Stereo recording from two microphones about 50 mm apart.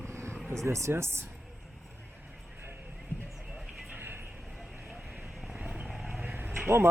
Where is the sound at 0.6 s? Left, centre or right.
Right.